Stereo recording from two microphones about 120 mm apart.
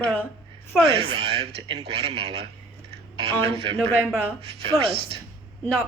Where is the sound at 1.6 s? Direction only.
35° right (ahead or behind).